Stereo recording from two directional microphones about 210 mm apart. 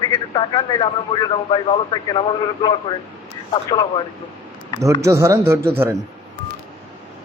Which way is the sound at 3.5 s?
20° left (ahead or behind).